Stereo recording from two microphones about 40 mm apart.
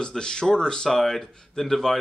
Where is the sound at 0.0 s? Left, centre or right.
Left.